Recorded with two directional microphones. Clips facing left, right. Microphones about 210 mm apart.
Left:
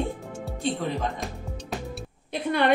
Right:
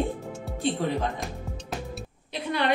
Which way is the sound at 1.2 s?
Centre (ahead or behind).